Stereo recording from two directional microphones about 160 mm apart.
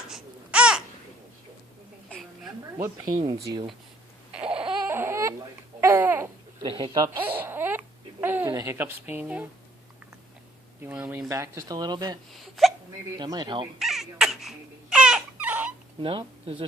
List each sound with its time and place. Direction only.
0.1 s babbling: 5° right (ahead or behind)
2.7 s speech: 15° right (ahead or behind)
3.2 s speech: 30° right (ahead or behind)
4.9 s baby cry: 15° right (ahead or behind)
5.8 s babbling: 15° right (ahead or behind)
6.6 s speech: 30° right (ahead or behind)
7.2 s babbling: 10° right (ahead or behind)
10.8 s speech: 10° right (ahead or behind); by 12.2 s 25° right (ahead or behind)
12.3 s speech: centre (ahead or behind)
13.1 s speech: 25° right (ahead or behind)
13.7 s a sound: centre (ahead or behind)
16.0 s speech: 35° right (ahead or behind)